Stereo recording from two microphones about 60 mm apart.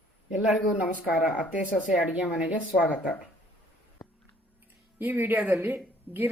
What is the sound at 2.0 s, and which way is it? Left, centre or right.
Speech, right.